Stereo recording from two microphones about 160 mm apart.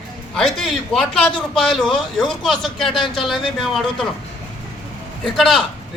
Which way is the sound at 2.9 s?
30° left (ahead or behind).